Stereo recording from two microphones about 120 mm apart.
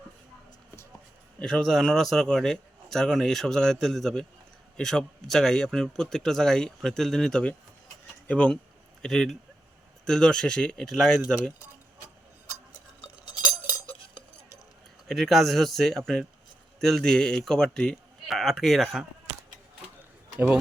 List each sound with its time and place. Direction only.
1.4 s a man's voice: 5° left (ahead or behind)
13.3 s chink: 35° left (ahead or behind)
15.0 s a man's voice: centre (ahead or behind)